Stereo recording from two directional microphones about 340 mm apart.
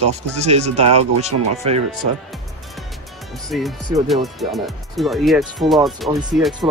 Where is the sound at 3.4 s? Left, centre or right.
Centre.